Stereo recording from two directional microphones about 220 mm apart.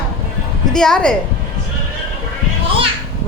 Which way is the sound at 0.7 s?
Centre (ahead or behind).